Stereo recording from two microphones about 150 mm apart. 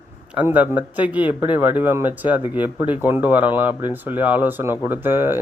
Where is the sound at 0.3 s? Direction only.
10° right (ahead or behind).